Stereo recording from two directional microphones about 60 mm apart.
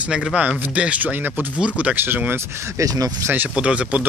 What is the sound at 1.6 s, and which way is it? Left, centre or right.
Speech, centre.